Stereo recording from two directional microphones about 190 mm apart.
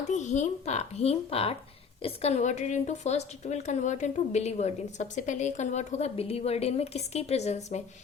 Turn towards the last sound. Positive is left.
turn(degrees=35)  # may be behind; listen again after turning